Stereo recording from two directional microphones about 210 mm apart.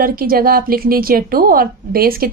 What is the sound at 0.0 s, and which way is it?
A woman's voice, 45° right (ahead or behind).